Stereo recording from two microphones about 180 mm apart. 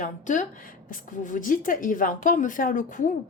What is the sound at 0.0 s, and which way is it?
Speech, 45° left (ahead or behind).